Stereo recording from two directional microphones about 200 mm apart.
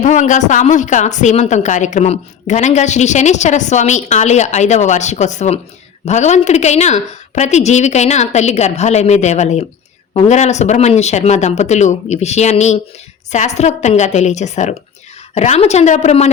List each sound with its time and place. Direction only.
0.0 s speech: 35° left (ahead or behind)